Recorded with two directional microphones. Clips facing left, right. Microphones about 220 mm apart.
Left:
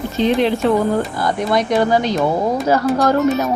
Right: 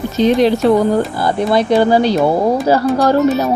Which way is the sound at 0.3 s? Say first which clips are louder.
Right 4 dB; 40° right (ahead or behind).